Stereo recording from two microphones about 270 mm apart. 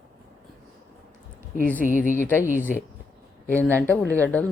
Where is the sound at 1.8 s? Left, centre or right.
Left.